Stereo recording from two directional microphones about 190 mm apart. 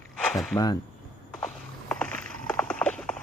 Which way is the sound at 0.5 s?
20° left (ahead or behind).